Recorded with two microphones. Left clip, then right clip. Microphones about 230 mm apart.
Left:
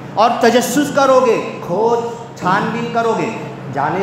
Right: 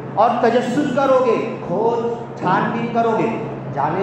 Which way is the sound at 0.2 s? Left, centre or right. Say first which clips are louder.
Left 3 dB; left.